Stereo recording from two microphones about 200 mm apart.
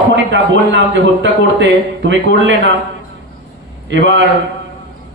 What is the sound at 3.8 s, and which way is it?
Speech, 65° right (ahead or behind).